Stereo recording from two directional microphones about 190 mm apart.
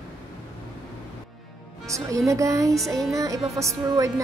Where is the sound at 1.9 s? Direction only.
15° right (ahead or behind).